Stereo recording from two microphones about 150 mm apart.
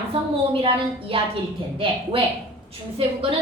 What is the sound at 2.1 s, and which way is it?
Speech, 40° right (ahead or behind).